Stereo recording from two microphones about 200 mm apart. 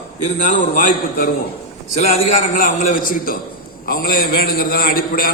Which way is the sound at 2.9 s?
45° left (ahead or behind).